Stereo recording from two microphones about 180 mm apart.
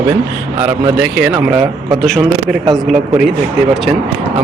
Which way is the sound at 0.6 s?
10° right (ahead or behind).